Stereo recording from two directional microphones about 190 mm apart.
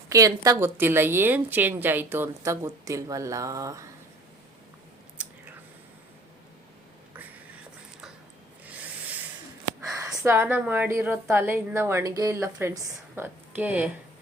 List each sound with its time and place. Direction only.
0.1 s a woman's voice: 15° right (ahead or behind)
5.1 s chewing: 5° right (ahead or behind)
10.2 s a woman's voice: 10° right (ahead or behind)